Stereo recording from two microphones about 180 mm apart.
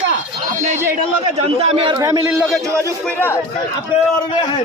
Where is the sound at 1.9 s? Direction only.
20° right (ahead or behind).